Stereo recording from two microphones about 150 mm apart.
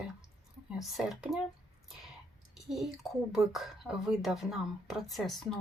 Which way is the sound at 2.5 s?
Centre (ahead or behind).